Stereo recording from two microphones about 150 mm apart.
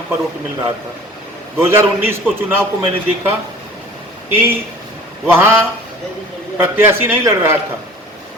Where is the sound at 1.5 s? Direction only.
15° right (ahead or behind).